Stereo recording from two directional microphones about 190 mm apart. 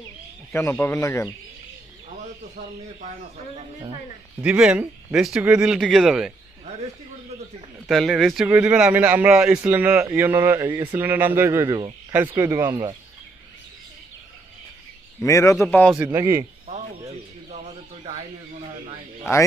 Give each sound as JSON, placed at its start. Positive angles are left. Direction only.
{"t": 0.5, "sound": "speech", "side_deg": 10}
{"t": 4.4, "sound": "speech", "side_deg": -5}
{"t": 7.9, "sound": "a man's voice", "side_deg": 0}
{"t": 15.2, "sound": "speech", "side_deg": 15}
{"t": 15.9, "sound": "a man's voice", "side_deg": -10}